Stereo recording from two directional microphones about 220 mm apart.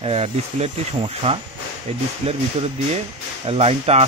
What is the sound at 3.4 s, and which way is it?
Speech, 25° right (ahead or behind).